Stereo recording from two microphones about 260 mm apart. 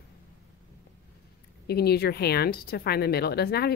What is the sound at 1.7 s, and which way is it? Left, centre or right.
Speech, left.